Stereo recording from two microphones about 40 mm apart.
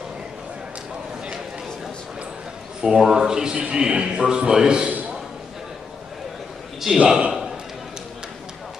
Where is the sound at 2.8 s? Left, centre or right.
Centre.